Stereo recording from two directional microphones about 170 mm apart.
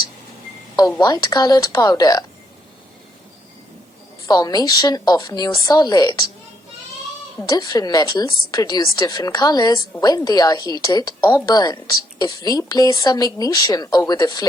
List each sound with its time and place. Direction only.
0.9 s speech: 25° left (ahead or behind)
4.3 s speech: 20° left (ahead or behind)
7.5 s speech: 20° left (ahead or behind)